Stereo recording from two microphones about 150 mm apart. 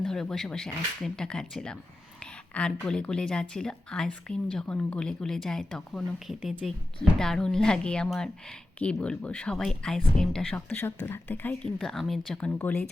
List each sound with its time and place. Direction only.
0.0 s a woman's voice: 5° left (ahead or behind)